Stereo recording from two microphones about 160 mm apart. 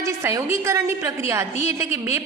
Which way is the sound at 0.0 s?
20° right (ahead or behind).